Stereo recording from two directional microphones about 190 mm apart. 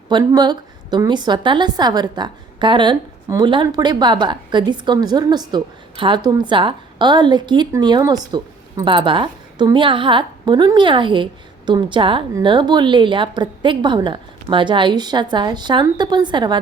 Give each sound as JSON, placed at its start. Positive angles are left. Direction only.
{"t": 0.1, "sound": "a woman's voice", "side_deg": -20}